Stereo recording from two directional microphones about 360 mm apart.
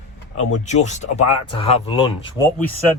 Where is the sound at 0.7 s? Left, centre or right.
Centre.